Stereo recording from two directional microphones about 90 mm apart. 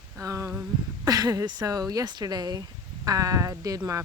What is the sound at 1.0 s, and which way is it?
Speech, 45° right (ahead or behind).